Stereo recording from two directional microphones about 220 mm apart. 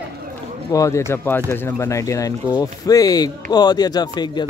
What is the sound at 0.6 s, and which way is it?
Speech, 15° left (ahead or behind).